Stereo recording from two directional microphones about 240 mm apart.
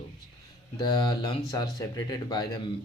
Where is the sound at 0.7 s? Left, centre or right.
Centre.